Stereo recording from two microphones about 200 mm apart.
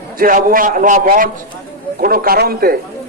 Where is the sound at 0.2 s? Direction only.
45° right (ahead or behind).